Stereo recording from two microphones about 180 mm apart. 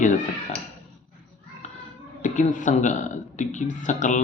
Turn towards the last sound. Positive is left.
turn(degrees=45)  # may be behind; listen again after turning